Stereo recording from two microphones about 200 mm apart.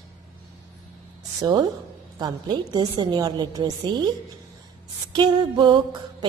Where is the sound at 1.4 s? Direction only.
25° right (ahead or behind).